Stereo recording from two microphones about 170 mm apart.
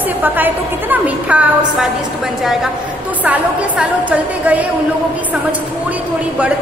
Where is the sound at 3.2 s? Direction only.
5° right (ahead or behind).